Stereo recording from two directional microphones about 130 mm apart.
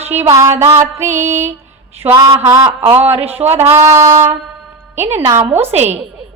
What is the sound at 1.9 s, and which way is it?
Speech, 15° right (ahead or behind).